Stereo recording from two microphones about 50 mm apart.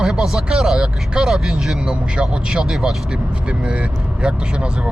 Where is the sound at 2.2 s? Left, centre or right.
Centre.